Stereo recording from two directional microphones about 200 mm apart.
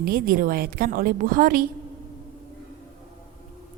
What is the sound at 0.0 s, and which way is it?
A woman's voice, 45° right (ahead or behind).